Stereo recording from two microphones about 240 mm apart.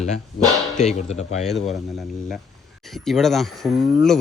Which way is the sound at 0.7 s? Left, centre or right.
Left.